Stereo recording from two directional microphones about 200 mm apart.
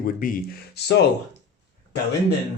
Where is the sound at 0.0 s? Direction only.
45° left (ahead or behind).